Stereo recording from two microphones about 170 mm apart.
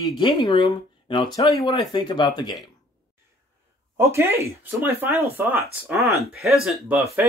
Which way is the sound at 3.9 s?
15° right (ahead or behind).